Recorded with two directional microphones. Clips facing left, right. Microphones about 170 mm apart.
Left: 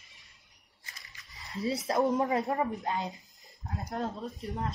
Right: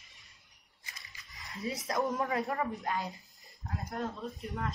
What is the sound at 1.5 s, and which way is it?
Speech, 30° left (ahead or behind).